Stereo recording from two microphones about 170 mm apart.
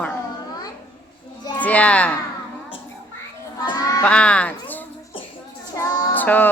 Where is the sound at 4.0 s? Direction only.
5° left (ahead or behind).